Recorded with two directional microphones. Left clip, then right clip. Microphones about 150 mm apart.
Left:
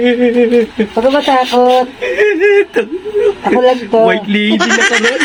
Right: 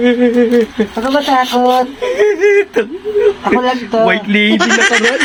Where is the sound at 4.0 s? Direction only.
20° left (ahead or behind).